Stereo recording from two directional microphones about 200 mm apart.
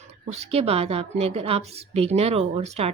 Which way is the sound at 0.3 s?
30° right (ahead or behind).